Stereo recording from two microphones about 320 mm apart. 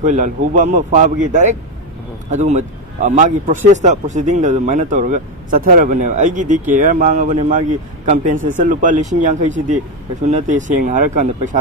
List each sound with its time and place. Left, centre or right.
0.0 s a man's voice: right